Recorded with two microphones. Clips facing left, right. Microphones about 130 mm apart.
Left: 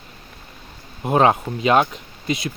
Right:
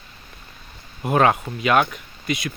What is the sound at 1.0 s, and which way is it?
Speech, 25° left (ahead or behind).